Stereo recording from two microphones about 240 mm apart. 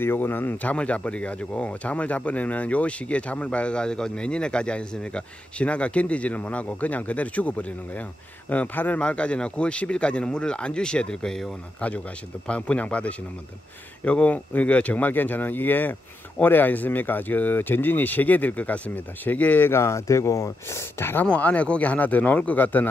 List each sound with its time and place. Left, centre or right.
0.0 s speech: centre